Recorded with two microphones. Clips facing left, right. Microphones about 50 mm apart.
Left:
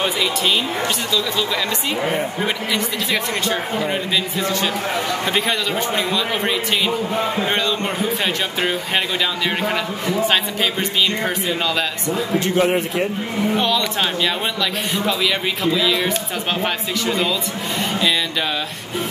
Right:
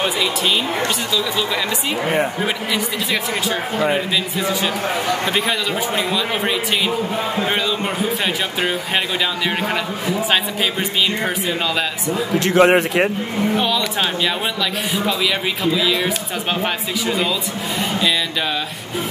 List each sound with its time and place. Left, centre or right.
0.8 s speech: centre
12.4 s a man's voice: right
13.6 s speech: centre